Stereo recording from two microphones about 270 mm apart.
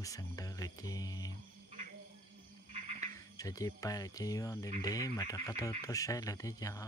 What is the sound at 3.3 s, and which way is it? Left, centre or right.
Speech, centre.